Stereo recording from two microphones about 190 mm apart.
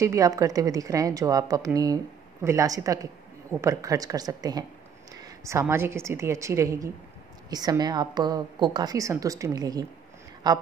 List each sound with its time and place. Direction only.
0.0 s a woman's voice: 15° right (ahead or behind)